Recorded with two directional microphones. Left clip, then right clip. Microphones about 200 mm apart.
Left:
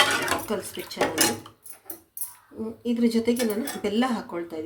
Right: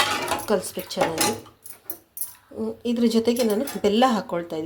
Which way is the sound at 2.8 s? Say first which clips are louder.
Right 2 dB; 30° right (ahead or behind).